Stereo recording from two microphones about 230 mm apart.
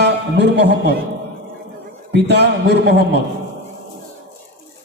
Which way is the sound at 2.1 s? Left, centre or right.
Right.